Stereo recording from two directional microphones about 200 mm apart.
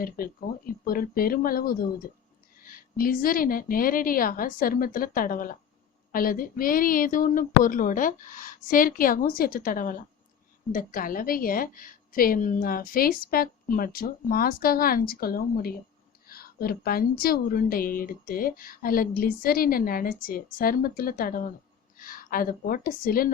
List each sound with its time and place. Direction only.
0.0 s a woman's voice: 45° left (ahead or behind)